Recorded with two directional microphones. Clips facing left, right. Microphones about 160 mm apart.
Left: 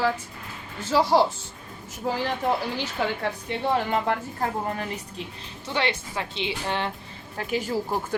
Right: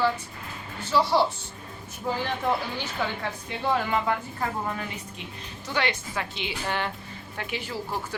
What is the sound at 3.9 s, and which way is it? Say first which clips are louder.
A woman's voice: left 1 dB; 45° left (ahead or behind).